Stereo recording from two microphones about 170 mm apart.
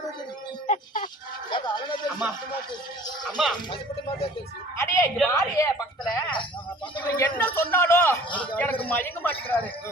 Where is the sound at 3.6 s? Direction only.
30° left (ahead or behind).